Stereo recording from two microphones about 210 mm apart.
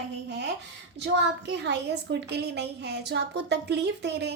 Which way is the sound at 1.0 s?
55° right (ahead or behind).